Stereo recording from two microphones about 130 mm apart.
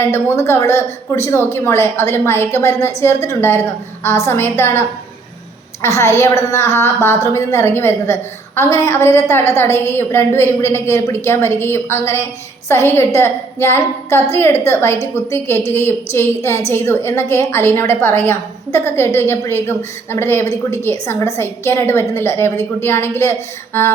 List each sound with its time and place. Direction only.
0.0 s a woman's voice: 20° left (ahead or behind)
6.0 s a woman's voice: 20° left (ahead or behind)